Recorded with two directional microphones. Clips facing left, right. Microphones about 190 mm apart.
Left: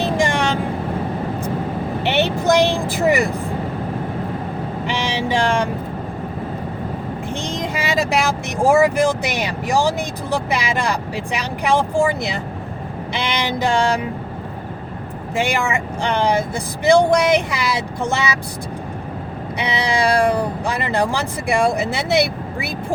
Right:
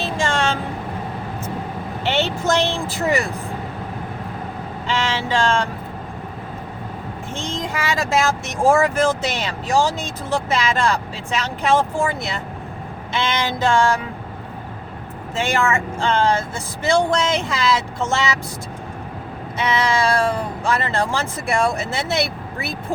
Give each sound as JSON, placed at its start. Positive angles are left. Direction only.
{"t": 0.0, "sound": "vehicle", "side_deg": 15}
{"t": 2.0, "sound": "vehicle", "side_deg": 15}
{"t": 4.9, "sound": "speech", "side_deg": 15}
{"t": 7.3, "sound": "speech", "side_deg": 15}
{"t": 15.4, "sound": "speech", "side_deg": 15}
{"t": 19.5, "sound": "speech", "side_deg": 15}